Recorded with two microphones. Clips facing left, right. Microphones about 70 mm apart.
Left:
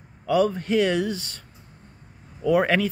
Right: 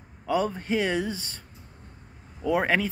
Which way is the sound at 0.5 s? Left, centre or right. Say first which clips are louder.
Left 5 dB; centre.